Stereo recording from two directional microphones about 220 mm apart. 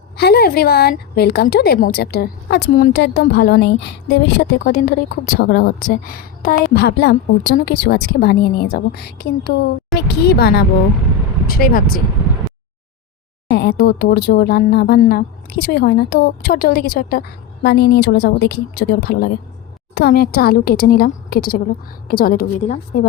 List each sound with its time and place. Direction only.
0.2 s a woman's voice: 45° left (ahead or behind)
13.5 s a woman's voice: 45° left (ahead or behind)